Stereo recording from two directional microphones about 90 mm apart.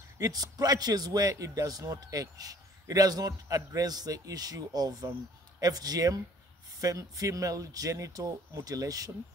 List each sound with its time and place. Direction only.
0.2 s a man's voice: 45° right (ahead or behind)